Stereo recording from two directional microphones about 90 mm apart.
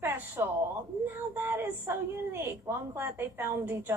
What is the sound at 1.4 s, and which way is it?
Child singing, 20° right (ahead or behind).